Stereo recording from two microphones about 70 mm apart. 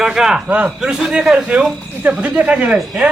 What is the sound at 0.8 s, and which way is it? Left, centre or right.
Speech, centre.